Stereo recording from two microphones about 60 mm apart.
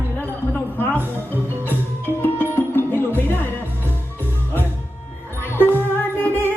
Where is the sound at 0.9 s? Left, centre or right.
Right.